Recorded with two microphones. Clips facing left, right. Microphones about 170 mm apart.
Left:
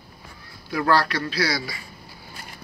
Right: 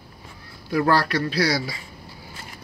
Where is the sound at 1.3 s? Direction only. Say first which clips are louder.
Right 3 dB; 40° right (ahead or behind).